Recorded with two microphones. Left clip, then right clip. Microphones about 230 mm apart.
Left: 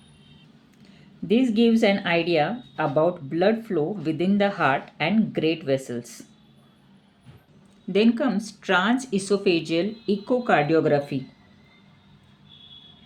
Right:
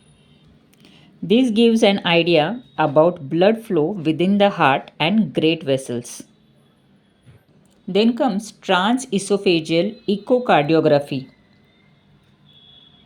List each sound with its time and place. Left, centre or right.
0.8 s a woman's voice: right
7.9 s speech: right